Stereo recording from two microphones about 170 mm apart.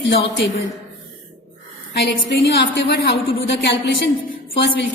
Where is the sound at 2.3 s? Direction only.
85° left.